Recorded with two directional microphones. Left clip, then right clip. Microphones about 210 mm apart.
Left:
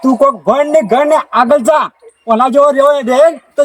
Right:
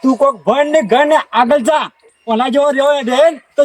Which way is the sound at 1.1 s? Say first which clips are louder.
Left 2 dB; 5° right (ahead or behind).